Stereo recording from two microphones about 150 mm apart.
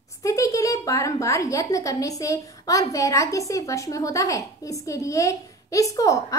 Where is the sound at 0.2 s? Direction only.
20° left (ahead or behind).